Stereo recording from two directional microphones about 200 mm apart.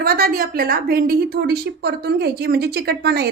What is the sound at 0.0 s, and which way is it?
A woman's voice, 50° right (ahead or behind).